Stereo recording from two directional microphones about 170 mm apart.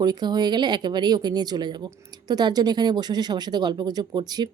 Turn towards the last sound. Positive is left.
turn(degrees=-25)  # may be behind; listen again after turning